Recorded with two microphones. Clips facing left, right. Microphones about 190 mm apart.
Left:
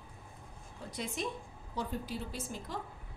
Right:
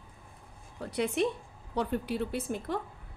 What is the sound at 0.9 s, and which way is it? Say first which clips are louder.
A woman's voice: right 9 dB; 65° right (ahead or behind).